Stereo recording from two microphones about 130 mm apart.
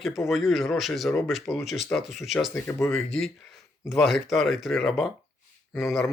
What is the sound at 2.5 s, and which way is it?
Speech, 20° left (ahead or behind).